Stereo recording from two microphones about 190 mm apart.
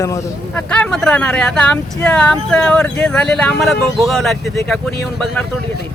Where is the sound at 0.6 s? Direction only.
5° left (ahead or behind).